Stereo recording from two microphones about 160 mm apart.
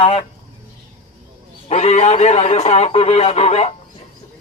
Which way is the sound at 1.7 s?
45° left (ahead or behind).